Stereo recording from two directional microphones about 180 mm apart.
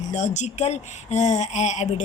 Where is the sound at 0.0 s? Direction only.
45° left (ahead or behind).